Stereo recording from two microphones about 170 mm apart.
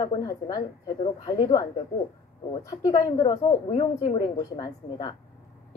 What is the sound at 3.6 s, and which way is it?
A woman's voice, 35° left (ahead or behind).